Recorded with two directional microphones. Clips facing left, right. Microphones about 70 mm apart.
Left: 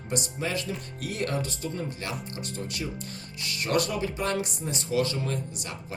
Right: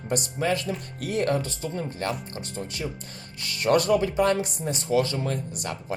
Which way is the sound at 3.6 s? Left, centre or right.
Right.